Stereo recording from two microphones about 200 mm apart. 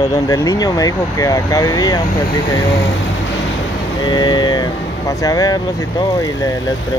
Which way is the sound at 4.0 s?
20° left (ahead or behind).